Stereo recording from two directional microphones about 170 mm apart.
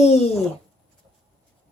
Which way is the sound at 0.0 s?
40° left (ahead or behind).